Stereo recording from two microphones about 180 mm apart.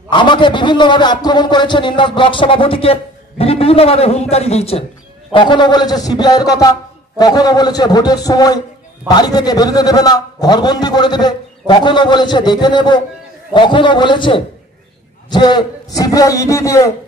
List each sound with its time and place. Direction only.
0.1 s a man's voice: 25° left (ahead or behind)